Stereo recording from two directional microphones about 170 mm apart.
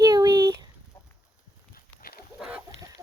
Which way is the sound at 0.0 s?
20° right (ahead or behind).